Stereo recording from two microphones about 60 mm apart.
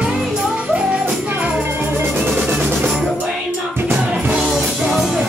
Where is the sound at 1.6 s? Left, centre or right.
Right.